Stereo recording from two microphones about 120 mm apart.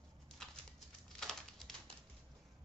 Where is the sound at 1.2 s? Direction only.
5° left (ahead or behind).